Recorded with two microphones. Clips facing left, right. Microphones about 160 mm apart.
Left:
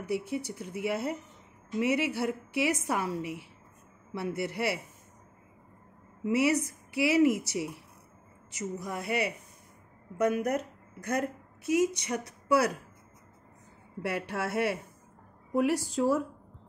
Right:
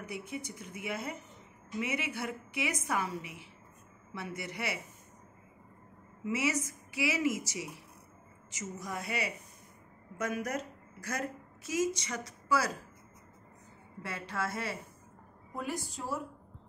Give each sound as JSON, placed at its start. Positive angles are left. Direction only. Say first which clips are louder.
{"t": 0.1, "sound": "a woman's voice", "louder": "left 10 dB", "side_deg": 65}
{"t": 6.2, "sound": "a woman's voice", "louder": "left 6 dB", "side_deg": 60}
{"t": 14.0, "sound": "a woman's voice", "louder": "left 5 dB", "side_deg": 65}